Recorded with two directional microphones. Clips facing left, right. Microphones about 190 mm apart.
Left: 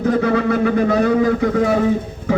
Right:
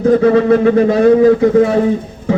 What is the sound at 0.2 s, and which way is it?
Speech, 30° right (ahead or behind).